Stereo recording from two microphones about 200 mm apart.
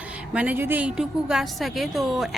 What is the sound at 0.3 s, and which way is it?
A woman's voice, 10° right (ahead or behind).